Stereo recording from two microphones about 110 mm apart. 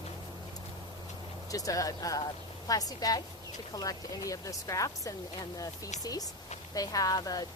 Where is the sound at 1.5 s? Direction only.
30° left (ahead or behind).